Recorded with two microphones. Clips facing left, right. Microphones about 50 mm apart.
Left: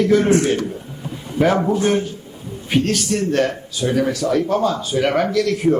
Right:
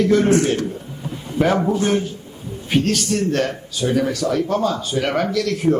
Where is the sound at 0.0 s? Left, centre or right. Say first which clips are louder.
Left 1 dB; centre.